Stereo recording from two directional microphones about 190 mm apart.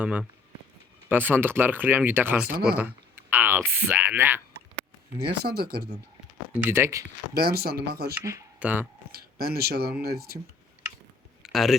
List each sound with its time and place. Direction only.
0.0 s speech: 5° right (ahead or behind)
5.3 s speech: 55° right (ahead or behind)
6.5 s speech: 10° right (ahead or behind)
7.3 s speech: 55° right (ahead or behind)
8.1 s speech: 15° right (ahead or behind)
9.1 s speech: 55° right (ahead or behind)
11.4 s speech: centre (ahead or behind)